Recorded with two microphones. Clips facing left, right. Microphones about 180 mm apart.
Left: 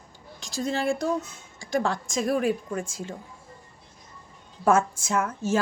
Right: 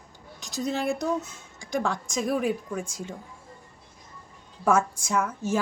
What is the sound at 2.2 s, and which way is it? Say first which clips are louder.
Speech: left 2 dB; 20° right (ahead or behind).